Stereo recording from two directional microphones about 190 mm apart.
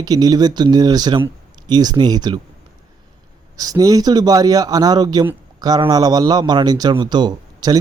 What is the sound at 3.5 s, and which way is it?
A man's voice, 20° right (ahead or behind).